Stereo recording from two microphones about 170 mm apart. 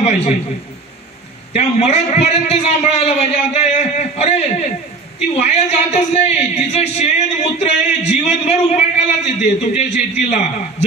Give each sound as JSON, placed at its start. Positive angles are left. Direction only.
{"t": 1.5, "sound": "a man's voice", "side_deg": 40}